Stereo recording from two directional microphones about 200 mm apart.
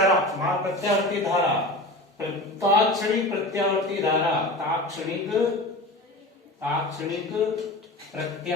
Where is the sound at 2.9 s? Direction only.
Centre (ahead or behind).